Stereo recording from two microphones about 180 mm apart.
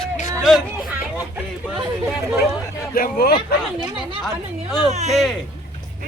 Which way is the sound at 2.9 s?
55° left (ahead or behind).